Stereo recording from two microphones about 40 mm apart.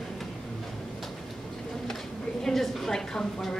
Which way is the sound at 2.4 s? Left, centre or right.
Centre.